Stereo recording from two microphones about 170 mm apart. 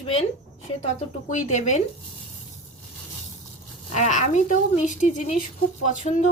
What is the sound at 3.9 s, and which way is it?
Speech, 45° left (ahead or behind).